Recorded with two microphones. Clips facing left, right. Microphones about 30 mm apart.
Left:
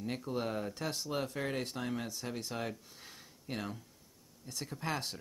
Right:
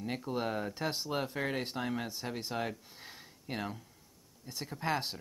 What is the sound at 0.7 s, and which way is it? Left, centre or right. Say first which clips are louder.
Speech: right 2 dB; right.